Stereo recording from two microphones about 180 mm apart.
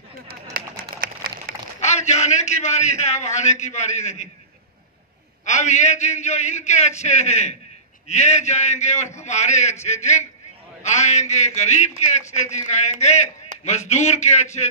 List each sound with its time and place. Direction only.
0.3 s a sound: 50° right (ahead or behind)
1.8 s a man's voice: 40° left (ahead or behind)
5.4 s a man's voice: 40° left (ahead or behind)